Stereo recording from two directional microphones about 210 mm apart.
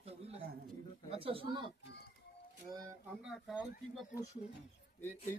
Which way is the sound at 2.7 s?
15° right (ahead or behind).